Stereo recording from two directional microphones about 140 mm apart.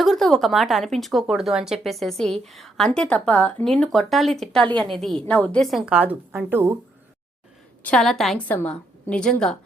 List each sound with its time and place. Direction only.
0.0 s speech: centre (ahead or behind); by 6.7 s 15° right (ahead or behind)
7.9 s a woman's voice: 5° left (ahead or behind)